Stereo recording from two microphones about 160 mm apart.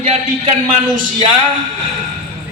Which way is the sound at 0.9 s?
55° right (ahead or behind).